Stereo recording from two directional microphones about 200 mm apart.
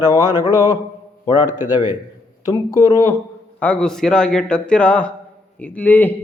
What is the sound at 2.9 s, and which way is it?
Speech, 15° left (ahead or behind).